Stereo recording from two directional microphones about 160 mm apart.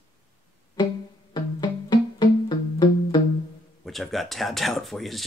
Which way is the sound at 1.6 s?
25° left (ahead or behind).